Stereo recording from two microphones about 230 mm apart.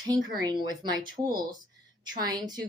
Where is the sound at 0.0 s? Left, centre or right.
Centre.